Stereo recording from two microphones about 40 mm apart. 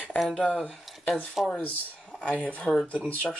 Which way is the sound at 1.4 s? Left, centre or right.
Centre.